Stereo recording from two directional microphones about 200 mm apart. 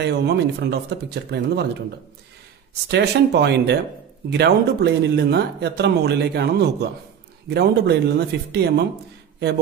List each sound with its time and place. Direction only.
0.0 s speech: 55° right (ahead or behind)
2.9 s speech: 55° right (ahead or behind)